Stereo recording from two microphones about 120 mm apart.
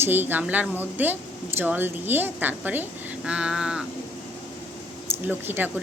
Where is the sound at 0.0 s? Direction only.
15° right (ahead or behind).